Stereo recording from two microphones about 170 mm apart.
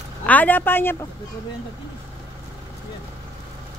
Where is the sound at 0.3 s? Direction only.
10° left (ahead or behind).